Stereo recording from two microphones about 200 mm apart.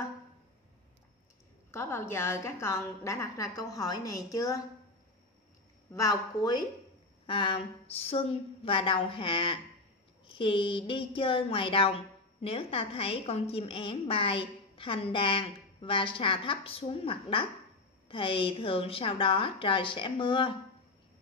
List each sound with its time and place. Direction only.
1.7 s a woman's voice: 10° left (ahead or behind)
5.9 s a woman's voice: 20° left (ahead or behind)